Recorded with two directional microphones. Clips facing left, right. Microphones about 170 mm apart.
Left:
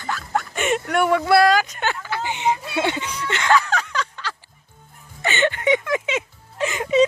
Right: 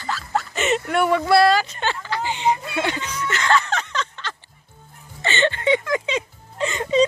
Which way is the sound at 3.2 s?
25° left (ahead or behind).